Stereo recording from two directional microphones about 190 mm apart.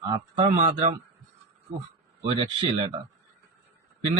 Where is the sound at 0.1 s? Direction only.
30° right (ahead or behind).